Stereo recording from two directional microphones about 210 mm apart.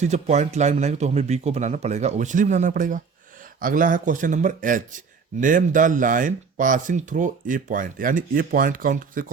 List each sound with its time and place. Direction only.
0.0 s a man's voice: 35° right (ahead or behind)